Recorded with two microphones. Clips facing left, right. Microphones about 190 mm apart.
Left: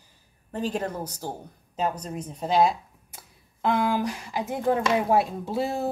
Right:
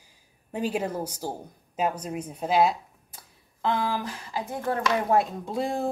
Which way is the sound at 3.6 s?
15° left (ahead or behind).